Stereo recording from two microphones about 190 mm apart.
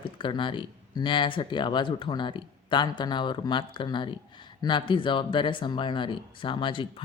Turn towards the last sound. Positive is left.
turn(degrees=25)  # may be behind; listen again after turning